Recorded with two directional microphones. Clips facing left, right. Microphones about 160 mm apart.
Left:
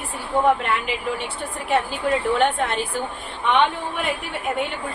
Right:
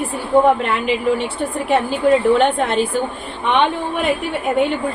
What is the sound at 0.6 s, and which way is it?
Speech, 25° right (ahead or behind).